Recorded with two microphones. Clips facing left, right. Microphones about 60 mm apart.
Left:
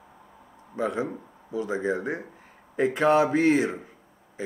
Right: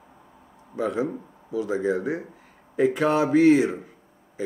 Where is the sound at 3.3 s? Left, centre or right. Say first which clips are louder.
Right 5 dB; left.